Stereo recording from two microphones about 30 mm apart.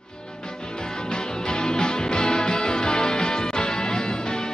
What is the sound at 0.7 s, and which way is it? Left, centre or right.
Music, left.